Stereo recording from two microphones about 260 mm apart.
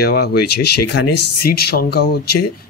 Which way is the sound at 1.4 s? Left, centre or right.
Left.